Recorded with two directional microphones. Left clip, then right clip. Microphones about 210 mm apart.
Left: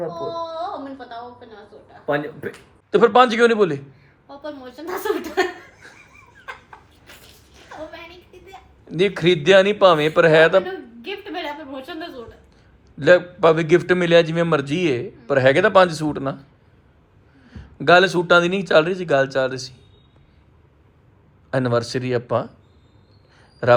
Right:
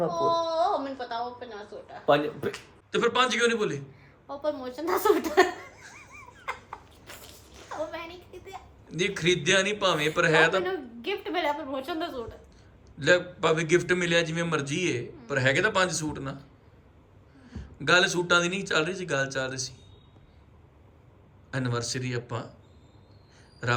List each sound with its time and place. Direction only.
0.1 s speech: 50° right (ahead or behind)
2.9 s speech: 5° left (ahead or behind)
4.8 s a man's voice: 5° right (ahead or behind)
5.8 s laughter: 5° left (ahead or behind)
8.4 s a man's voice: 5° left (ahead or behind)
17.4 s a man's voice: 5° left (ahead or behind)
21.5 s speech: 5° left (ahead or behind)
23.6 s a man's voice: 5° left (ahead or behind)